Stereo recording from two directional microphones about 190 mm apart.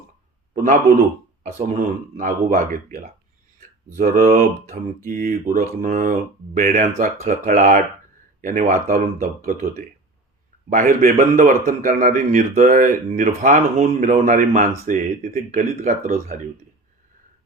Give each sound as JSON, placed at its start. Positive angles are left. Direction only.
{"t": 0.5, "sound": "a man's voice", "side_deg": -45}